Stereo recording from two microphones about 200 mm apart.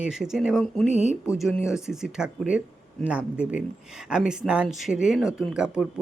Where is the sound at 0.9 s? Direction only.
35° left (ahead or behind).